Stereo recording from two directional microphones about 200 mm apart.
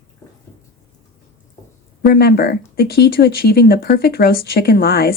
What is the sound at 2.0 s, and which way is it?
Speech, 50° left (ahead or behind).